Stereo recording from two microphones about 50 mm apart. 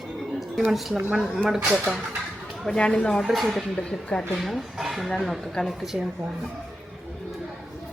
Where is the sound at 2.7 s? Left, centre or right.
Left.